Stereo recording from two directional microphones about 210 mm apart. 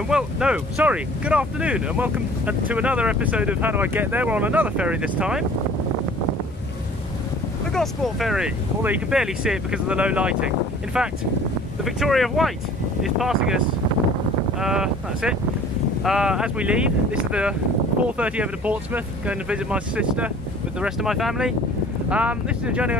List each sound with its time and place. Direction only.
0.1 s speech: 5° right (ahead or behind)
7.7 s speech: centre (ahead or behind)
14.6 s speech: 5° right (ahead or behind)